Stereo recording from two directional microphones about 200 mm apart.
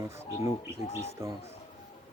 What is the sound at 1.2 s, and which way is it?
Speech, 15° right (ahead or behind).